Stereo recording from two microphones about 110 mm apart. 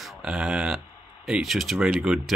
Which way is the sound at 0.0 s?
5° right (ahead or behind).